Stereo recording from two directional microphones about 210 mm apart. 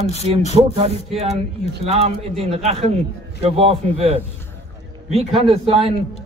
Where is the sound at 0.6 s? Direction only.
30° right (ahead or behind).